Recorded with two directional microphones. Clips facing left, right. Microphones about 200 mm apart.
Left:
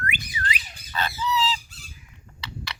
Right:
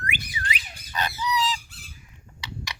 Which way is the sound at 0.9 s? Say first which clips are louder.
Left 1 dB; 15° right (ahead or behind).